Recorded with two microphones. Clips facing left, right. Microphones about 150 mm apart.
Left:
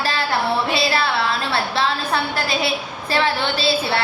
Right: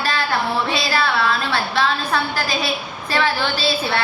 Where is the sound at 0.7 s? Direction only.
25° left (ahead or behind).